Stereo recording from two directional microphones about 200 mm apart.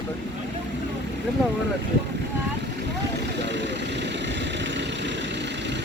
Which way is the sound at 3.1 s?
60° right (ahead or behind).